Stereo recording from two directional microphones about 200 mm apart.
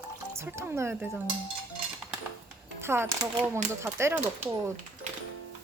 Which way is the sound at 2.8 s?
10° right (ahead or behind).